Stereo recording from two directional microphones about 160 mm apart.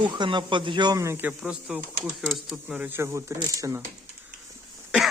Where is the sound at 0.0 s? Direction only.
30° right (ahead or behind).